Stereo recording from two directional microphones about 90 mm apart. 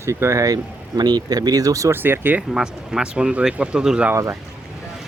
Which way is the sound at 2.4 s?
5° right (ahead or behind).